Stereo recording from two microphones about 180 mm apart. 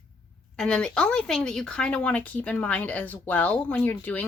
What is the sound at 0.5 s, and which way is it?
A woman's voice, 5° left (ahead or behind).